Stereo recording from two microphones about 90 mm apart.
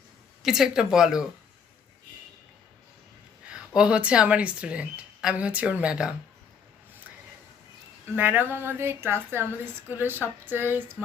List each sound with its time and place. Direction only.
0.4 s speech: 5° right (ahead or behind)
3.8 s speech: 10° right (ahead or behind)
8.1 s a woman's voice: 20° right (ahead or behind)